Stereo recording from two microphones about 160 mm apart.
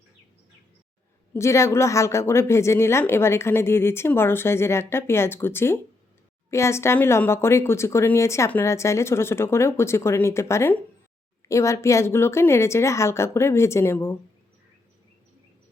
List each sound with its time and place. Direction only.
1.3 s a woman's voice: 15° left (ahead or behind)